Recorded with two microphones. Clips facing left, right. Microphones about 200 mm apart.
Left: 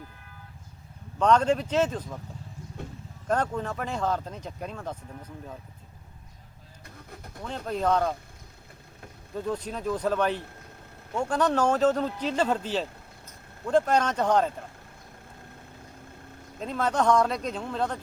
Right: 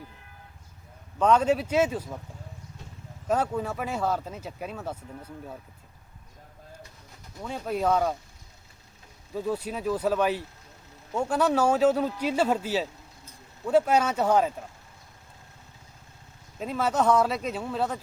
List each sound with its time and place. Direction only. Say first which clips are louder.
1.2 s speech: even; 5° right (ahead or behind)
3.2 s speech: right 1 dB; 5° right (ahead or behind)
7.4 s speech: right 1 dB; 10° right (ahead or behind)
9.3 s speech: right 1 dB; 5° right (ahead or behind)
16.6 s speech: right 1 dB; 5° right (ahead or behind)